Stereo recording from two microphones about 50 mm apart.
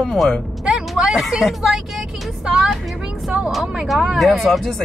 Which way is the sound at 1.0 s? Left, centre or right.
Centre.